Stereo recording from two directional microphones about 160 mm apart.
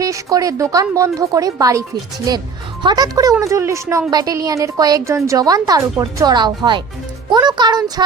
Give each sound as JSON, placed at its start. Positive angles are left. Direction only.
{"t": 0.0, "sound": "speech", "side_deg": -20}
{"t": 2.8, "sound": "speech", "side_deg": -25}